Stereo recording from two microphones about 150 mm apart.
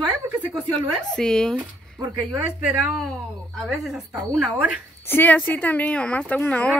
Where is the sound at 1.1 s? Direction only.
5° left (ahead or behind).